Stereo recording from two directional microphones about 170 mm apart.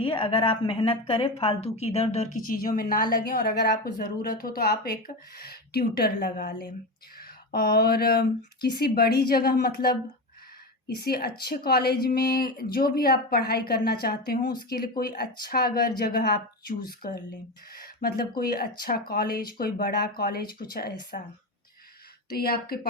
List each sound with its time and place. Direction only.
0.0 s a woman's voice: 30° left (ahead or behind)
2.5 s a woman's voice: 55° left (ahead or behind)
22.3 s a woman's voice: 65° left (ahead or behind)